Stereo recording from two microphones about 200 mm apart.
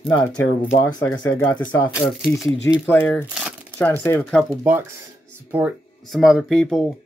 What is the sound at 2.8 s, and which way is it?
Speech, 10° left (ahead or behind).